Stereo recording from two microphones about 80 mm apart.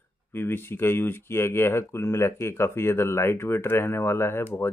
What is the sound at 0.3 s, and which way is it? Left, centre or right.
Speech, left.